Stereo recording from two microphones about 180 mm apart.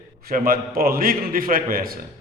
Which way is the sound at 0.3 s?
55° right (ahead or behind).